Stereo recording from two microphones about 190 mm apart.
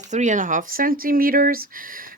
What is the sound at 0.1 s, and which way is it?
Speech, 40° right (ahead or behind).